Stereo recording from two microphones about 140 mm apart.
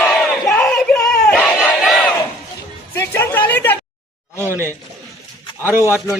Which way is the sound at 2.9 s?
15° left (ahead or behind).